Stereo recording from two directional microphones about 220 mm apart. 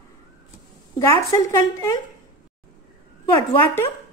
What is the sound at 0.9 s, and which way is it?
Speech, 15° left (ahead or behind).